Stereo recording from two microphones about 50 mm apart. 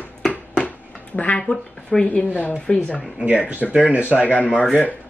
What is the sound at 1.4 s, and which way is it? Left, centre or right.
Speech, centre.